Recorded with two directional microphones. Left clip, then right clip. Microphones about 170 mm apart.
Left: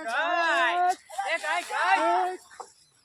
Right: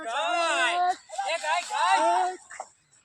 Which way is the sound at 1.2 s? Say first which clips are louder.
Right 1 dB; 75° right (ahead or behind).